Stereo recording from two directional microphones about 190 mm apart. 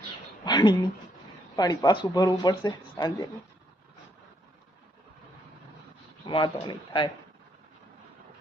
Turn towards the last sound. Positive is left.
turn(degrees=25)  # may be behind; listen again after turning